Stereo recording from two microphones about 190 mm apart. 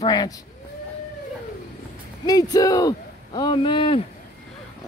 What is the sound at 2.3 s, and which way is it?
Speech, 20° left (ahead or behind).